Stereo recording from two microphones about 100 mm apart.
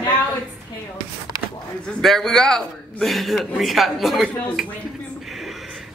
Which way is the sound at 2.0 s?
5° left (ahead or behind).